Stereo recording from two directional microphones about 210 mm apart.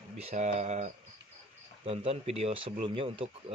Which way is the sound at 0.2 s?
30° right (ahead or behind).